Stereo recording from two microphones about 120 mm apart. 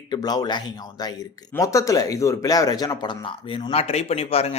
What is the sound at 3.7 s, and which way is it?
Speech, 60° left (ahead or behind).